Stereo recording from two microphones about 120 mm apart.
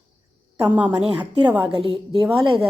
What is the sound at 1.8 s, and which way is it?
Speech, 45° right (ahead or behind).